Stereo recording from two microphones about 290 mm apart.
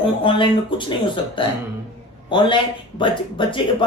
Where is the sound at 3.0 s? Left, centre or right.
Centre.